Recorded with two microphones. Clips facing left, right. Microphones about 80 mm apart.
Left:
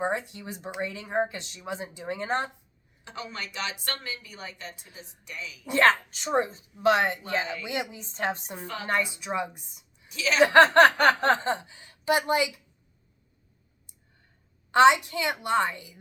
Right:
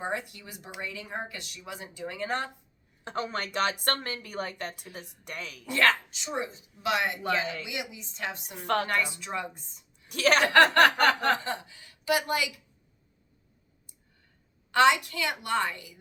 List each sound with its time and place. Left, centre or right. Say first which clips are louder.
0.0 s speech: left 4 dB; left
3.0 s a woman's voice: right 5 dB; right
5.6 s speech: left 4 dB; left
6.1 s a woman's voice: left 7 dB; left
8.6 s speech: right 10 dB; right
8.9 s a woman's voice: left 2 dB; left
10.1 s speech: right 3 dB; right
10.4 s speech: left 5 dB; left
14.7 s speech: left 4 dB; left